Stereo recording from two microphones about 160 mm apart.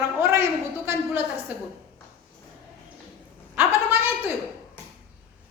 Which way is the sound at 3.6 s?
10° right (ahead or behind).